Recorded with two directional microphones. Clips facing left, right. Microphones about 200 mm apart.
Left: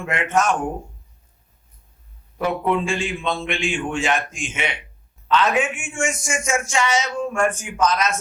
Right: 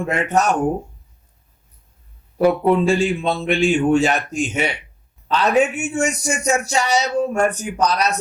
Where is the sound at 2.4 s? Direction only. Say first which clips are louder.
Right 6 dB; 35° right (ahead or behind).